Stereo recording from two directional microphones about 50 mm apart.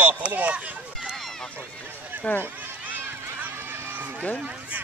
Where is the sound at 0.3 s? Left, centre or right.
Right.